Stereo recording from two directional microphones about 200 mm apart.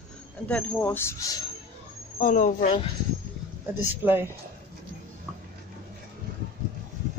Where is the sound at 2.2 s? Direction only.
40° left (ahead or behind).